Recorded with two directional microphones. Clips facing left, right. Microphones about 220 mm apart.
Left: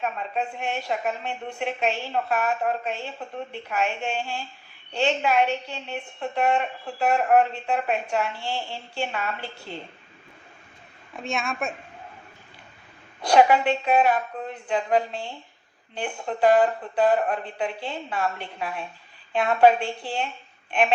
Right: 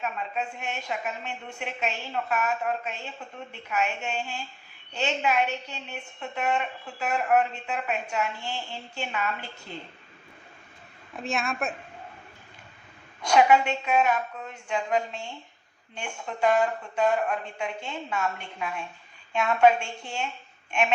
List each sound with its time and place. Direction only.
0.0 s speech: 35° left (ahead or behind)
11.2 s a woman's voice: centre (ahead or behind)
13.2 s speech: 35° left (ahead or behind)